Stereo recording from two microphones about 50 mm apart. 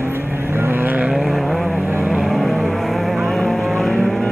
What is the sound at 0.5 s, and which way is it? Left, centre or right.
Vehicle, right.